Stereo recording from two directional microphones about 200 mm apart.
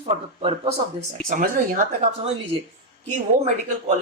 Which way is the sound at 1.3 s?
45° right (ahead or behind).